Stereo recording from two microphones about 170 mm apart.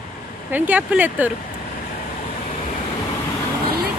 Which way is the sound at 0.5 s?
10° right (ahead or behind).